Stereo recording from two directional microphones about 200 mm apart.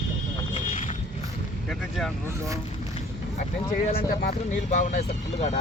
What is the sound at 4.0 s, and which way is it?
Speech, 45° left (ahead or behind).